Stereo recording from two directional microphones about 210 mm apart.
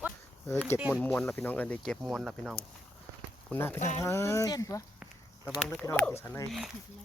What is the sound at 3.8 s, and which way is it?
Speech, 35° left (ahead or behind).